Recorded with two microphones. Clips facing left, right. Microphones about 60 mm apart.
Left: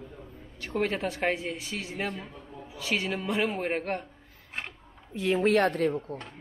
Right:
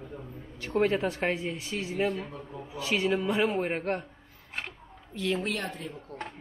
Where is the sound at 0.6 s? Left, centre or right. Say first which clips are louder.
Right 3 dB; centre.